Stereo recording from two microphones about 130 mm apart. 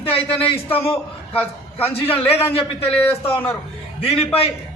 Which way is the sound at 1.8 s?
50° left (ahead or behind).